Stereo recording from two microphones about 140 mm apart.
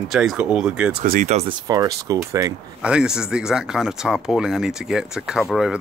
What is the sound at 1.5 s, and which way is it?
Speech, 25° right (ahead or behind).